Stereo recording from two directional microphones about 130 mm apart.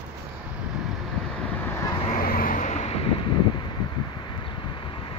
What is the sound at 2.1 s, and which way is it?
Vehicle, 90° left.